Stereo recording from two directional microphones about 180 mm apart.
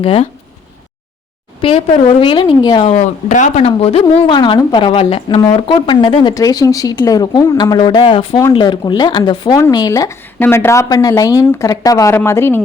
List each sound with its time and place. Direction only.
0.0 s speech: 30° left (ahead or behind)
1.6 s speech: 30° left (ahead or behind)
2.9 s speech: 40° left (ahead or behind); by 12.6 s 15° left (ahead or behind)